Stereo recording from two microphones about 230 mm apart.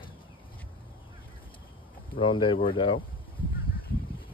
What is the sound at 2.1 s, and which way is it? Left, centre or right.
Speech, left.